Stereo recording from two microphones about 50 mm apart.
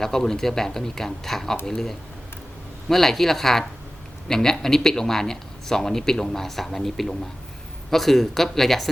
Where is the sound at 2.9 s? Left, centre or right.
Centre.